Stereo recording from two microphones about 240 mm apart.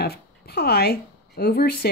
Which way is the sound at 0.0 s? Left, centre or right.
Left.